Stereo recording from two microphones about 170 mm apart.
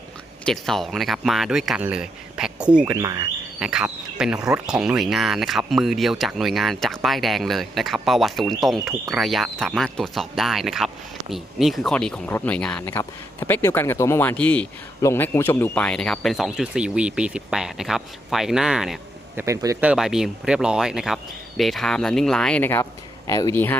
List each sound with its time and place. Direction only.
0.4 s speech: centre (ahead or behind)
3.0 s speech: 20° right (ahead or behind)
3.6 s speech: 5° right (ahead or behind)
19.4 s speech: 15° right (ahead or behind); by 23.7 s 15° left (ahead or behind)